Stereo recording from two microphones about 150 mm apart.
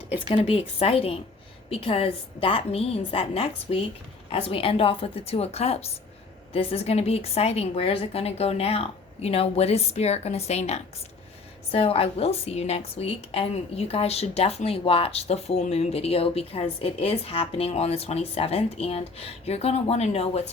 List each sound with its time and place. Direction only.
0.4 s a woman's voice: 40° left (ahead or behind)